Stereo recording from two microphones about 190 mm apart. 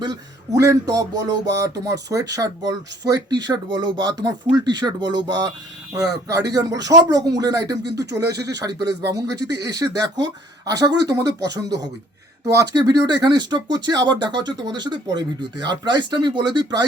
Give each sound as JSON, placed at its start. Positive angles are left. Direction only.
{"t": 0.0, "sound": "a sound", "side_deg": -20}
{"t": 3.1, "sound": "speech", "side_deg": -20}
{"t": 5.9, "sound": "a sound", "side_deg": -15}
{"t": 6.5, "sound": "speech", "side_deg": -20}
{"t": 8.3, "sound": "speech", "side_deg": -60}
{"t": 8.5, "sound": "speech", "side_deg": -20}